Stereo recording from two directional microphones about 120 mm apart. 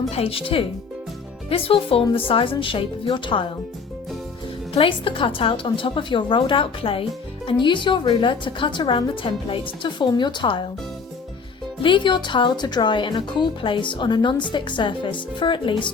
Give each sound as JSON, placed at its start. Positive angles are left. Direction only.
{"t": 0.1, "sound": "a woman's voice", "side_deg": 55}
{"t": 4.7, "sound": "a woman's voice", "side_deg": 50}
{"t": 11.8, "sound": "speech", "side_deg": 40}